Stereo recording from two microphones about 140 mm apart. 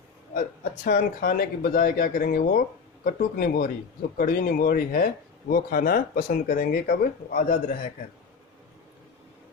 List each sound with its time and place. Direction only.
0.3 s speech: 90° left